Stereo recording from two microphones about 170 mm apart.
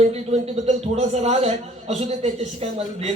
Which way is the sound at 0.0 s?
35° right (ahead or behind).